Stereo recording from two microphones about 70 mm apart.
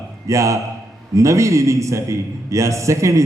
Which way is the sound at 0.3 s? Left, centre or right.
Right.